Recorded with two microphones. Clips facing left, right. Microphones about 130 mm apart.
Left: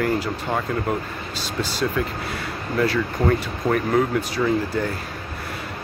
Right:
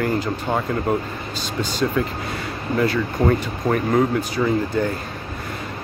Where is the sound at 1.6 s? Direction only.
Centre (ahead or behind).